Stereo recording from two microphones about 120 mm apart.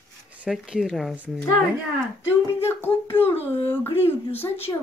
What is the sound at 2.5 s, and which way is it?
A woman's voice, 20° left (ahead or behind).